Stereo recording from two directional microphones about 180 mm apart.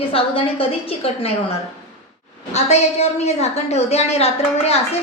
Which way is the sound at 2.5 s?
40° left (ahead or behind).